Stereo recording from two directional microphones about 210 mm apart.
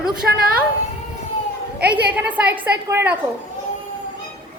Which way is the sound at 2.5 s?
10° right (ahead or behind).